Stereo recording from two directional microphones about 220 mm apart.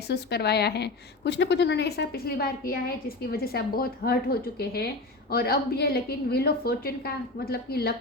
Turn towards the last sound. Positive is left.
turn(degrees=45)  # may be behind; listen again after turning